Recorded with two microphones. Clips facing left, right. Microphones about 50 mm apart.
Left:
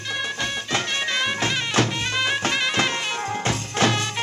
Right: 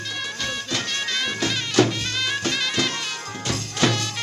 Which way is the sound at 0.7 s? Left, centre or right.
Left.